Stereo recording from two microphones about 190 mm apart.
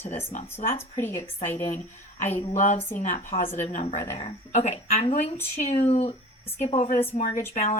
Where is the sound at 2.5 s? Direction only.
40° left (ahead or behind).